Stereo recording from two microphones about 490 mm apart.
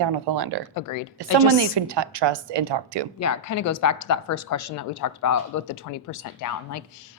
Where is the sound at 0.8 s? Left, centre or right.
Left.